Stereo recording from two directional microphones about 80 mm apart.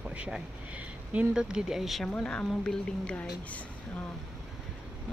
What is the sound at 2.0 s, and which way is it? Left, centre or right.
A woman's voice, centre.